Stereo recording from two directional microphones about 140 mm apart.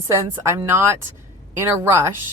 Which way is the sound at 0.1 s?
20° right (ahead or behind).